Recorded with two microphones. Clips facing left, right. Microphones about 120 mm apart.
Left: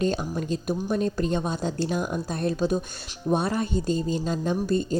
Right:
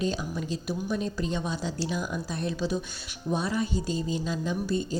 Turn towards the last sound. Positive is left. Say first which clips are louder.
# left 4 dB
turn(degrees=50)  # may be behind; listen again after turning